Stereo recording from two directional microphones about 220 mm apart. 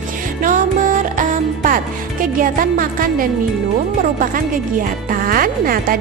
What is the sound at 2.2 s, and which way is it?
Speech, 40° right (ahead or behind).